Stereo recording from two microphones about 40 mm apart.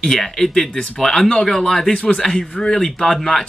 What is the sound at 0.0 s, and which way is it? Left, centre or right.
Speech, centre.